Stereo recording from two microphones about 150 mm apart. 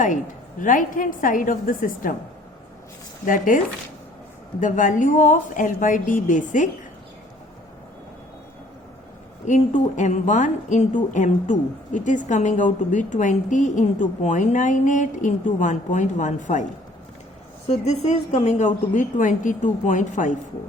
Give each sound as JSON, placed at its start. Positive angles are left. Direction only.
{"t": 0.6, "sound": "a woman's voice", "side_deg": 60}
{"t": 3.2, "sound": "a woman's voice", "side_deg": 65}
{"t": 4.6, "sound": "a woman's voice", "side_deg": 60}
{"t": 9.5, "sound": "a woman's voice", "side_deg": 55}
{"t": 17.7, "sound": "a woman's voice", "side_deg": 50}